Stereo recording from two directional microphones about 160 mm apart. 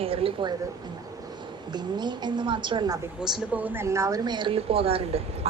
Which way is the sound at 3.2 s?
5° right (ahead or behind).